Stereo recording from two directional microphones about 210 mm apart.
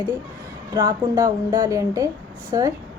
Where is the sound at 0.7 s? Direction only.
15° right (ahead or behind).